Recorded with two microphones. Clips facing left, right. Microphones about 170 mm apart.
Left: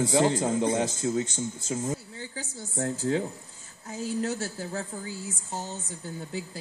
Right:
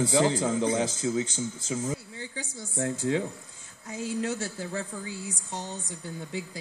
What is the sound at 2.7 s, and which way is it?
Speech, 40° left (ahead or behind).